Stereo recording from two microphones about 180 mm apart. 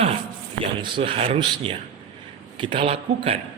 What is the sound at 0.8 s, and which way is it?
Speech, 30° right (ahead or behind).